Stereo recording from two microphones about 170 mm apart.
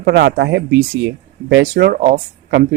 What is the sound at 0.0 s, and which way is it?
Speech, 75° right (ahead or behind).